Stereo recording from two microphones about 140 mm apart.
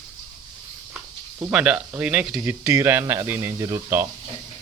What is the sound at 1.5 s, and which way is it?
Speech, 5° right (ahead or behind).